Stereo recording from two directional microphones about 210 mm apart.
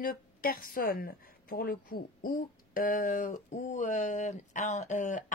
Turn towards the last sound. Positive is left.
turn(degrees=35)  # may be behind; listen again after turning